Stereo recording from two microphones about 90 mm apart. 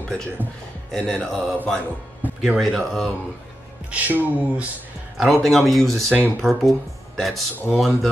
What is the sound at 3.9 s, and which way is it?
Speech, 20° right (ahead or behind).